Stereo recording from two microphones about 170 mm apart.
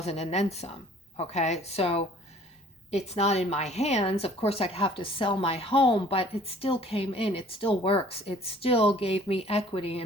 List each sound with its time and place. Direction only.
0.0 s a woman's voice: 40° left (ahead or behind)